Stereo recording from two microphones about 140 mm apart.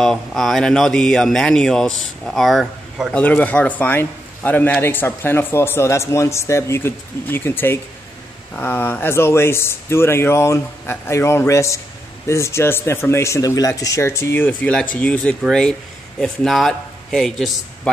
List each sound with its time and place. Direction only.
0.0 s speech: 5° left (ahead or behind)
3.2 s a man's voice: 10° left (ahead or behind)